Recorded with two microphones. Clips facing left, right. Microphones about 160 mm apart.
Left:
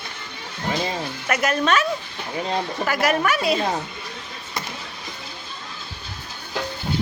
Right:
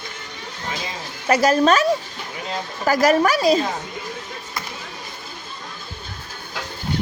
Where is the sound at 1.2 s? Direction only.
35° right (ahead or behind).